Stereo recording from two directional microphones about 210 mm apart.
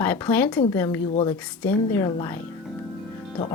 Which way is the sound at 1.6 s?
10° left (ahead or behind).